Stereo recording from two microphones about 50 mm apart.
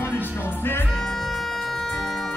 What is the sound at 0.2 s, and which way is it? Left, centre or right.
Music, left.